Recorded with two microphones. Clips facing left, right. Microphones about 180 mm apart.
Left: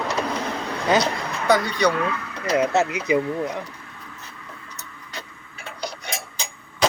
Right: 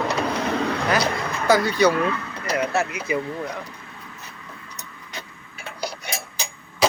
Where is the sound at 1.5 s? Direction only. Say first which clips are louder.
Right 2 dB; 5° right (ahead or behind).